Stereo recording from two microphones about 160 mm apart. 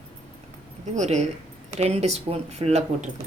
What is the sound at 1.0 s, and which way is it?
Speech, 45° right (ahead or behind).